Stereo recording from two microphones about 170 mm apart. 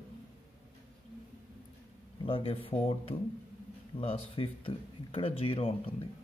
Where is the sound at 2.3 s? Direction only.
30° left (ahead or behind).